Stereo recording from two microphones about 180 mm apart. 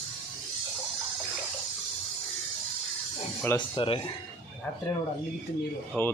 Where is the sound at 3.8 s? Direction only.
30° left (ahead or behind).